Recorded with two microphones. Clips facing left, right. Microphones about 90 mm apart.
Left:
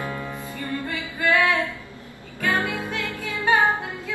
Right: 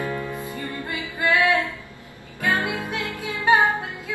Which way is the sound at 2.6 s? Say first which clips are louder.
Right 1 dB; 20° right (ahead or behind).